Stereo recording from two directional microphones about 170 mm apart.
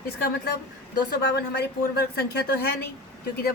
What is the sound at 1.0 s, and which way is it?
Speech, 70° left (ahead or behind).